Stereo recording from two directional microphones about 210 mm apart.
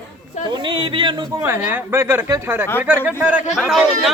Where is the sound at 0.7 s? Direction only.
20° right (ahead or behind).